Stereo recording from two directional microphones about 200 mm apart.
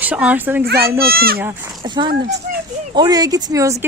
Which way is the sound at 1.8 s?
20° right (ahead or behind).